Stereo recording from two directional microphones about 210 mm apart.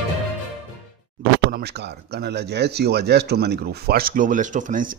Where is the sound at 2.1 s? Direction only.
50° right (ahead or behind).